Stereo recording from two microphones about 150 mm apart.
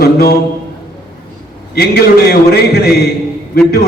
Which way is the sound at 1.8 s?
90° left.